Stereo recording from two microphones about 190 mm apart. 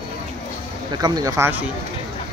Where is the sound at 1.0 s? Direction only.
20° right (ahead or behind).